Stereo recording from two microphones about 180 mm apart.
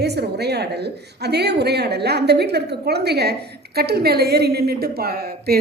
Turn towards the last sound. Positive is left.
turn(degrees=-60)  # may be behind; listen again after turning